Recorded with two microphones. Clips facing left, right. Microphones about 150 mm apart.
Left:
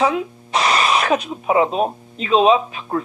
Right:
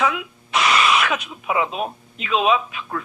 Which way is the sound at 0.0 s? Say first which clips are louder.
Left 4 dB; 35° left (ahead or behind).